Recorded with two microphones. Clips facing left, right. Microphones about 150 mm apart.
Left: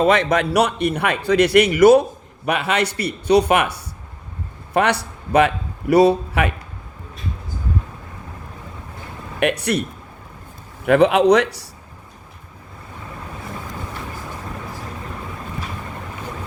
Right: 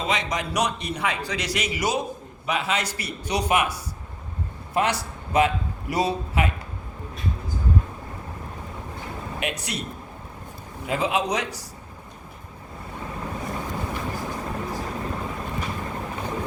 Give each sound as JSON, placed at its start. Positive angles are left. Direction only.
{"t": 0.0, "sound": "a man's voice", "side_deg": 55}
{"t": 9.4, "sound": "a man's voice", "side_deg": 65}
{"t": 10.8, "sound": "a man's voice", "side_deg": 70}